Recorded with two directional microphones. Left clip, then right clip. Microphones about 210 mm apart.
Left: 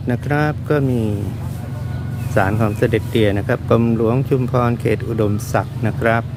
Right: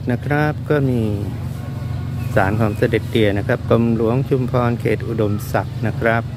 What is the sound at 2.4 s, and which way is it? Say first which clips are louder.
Speech: even; 5° left (ahead or behind).